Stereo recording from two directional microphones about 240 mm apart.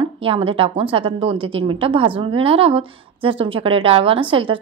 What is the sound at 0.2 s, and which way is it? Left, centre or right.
A woman's voice, right.